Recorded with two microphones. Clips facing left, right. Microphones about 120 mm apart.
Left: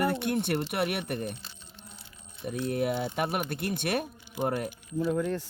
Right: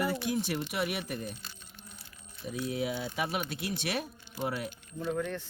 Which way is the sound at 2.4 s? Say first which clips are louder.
Left 4 dB; 60° left (ahead or behind).